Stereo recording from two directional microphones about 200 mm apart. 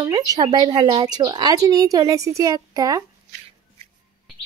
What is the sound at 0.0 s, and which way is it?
Speech, 20° right (ahead or behind).